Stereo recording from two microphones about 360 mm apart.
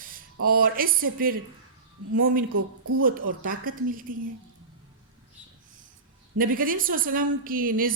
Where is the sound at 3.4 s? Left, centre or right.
Right.